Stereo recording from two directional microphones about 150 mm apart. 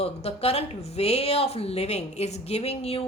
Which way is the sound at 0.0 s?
45° left (ahead or behind).